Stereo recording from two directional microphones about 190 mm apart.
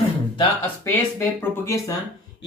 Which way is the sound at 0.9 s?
10° left (ahead or behind).